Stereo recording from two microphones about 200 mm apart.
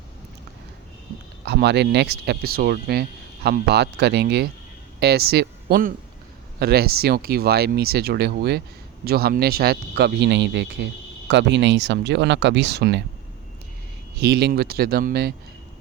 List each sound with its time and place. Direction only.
1.5 s speech: 55° right (ahead or behind)
14.2 s speech: 55° right (ahead or behind)